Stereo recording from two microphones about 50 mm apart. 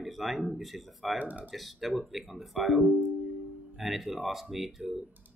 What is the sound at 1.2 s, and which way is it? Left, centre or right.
Speech, right.